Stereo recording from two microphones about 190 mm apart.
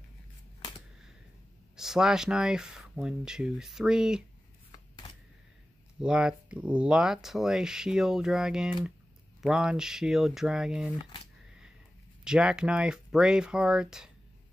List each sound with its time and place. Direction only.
1.8 s speech: centre (ahead or behind)
4.7 s a sound: 20° left (ahead or behind)
5.9 s speech: 5° right (ahead or behind)
12.3 s speech: 5° right (ahead or behind)